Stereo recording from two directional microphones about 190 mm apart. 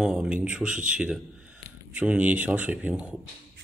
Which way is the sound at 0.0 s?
5° right (ahead or behind).